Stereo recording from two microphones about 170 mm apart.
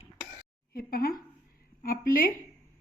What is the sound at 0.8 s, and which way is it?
A woman's voice, 60° left (ahead or behind).